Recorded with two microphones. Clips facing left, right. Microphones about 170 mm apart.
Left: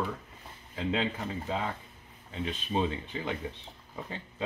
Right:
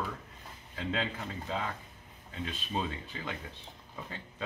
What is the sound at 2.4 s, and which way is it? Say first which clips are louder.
Speech: left 5 dB; 20° left (ahead or behind).